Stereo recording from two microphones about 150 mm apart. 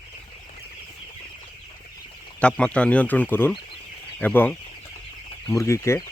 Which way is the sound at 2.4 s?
5° left (ahead or behind).